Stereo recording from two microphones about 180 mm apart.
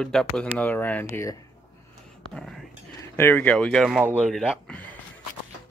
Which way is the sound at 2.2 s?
Centre (ahead or behind).